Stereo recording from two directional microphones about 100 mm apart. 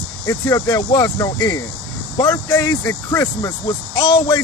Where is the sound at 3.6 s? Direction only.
50° left (ahead or behind).